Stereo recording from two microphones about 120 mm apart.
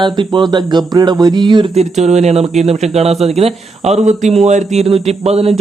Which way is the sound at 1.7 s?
70° right (ahead or behind).